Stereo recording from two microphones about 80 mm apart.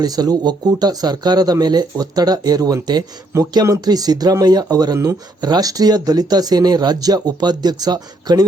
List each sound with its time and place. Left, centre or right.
0.0 s speech: right